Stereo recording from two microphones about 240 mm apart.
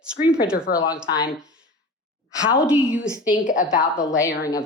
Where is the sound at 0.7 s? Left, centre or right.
Left.